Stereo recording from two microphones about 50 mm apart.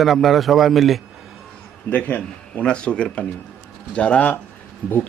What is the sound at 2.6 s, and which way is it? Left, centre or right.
Speech, centre.